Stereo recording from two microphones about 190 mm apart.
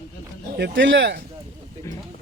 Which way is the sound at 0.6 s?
75° right (ahead or behind).